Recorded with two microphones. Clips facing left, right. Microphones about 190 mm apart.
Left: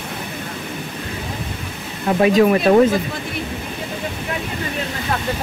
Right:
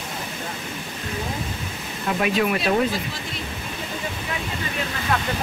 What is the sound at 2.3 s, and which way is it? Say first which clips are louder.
Speech: left 9 dB; 45° left (ahead or behind).